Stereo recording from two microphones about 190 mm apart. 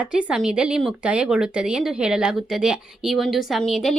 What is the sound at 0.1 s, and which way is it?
A woman's voice, 5° right (ahead or behind).